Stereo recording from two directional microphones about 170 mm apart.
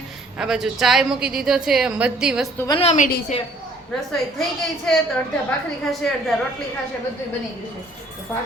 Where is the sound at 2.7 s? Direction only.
35° left (ahead or behind).